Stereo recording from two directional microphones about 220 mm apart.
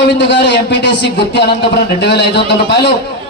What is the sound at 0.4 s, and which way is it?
A man's voice, 55° left (ahead or behind).